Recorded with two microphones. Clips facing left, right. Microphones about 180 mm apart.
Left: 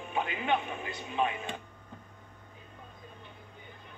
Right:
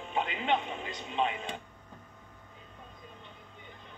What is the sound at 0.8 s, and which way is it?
Speech, 20° right (ahead or behind).